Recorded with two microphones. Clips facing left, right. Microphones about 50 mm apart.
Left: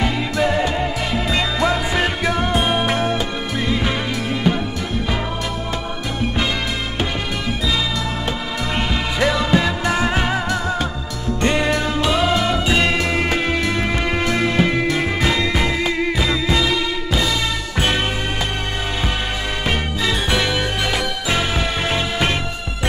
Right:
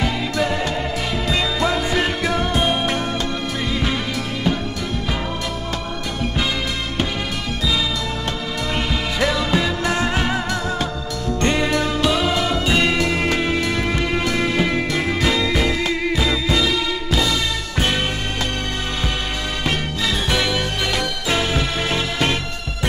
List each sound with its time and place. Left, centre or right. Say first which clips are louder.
0.0 s music: left 2 dB; centre
8.7 s music: left 2 dB; centre
20.0 s music: left 1 dB; centre